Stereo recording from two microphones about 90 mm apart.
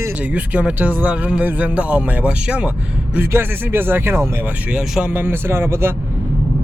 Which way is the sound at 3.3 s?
25° right (ahead or behind).